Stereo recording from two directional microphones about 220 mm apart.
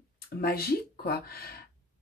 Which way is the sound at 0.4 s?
45° left (ahead or behind).